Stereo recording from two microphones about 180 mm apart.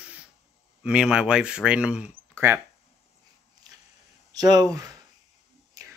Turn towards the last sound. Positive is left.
turn(degrees=-20)  # may be behind; listen again after turning